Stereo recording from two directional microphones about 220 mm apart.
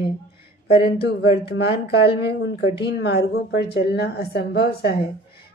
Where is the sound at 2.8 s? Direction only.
50° left (ahead or behind).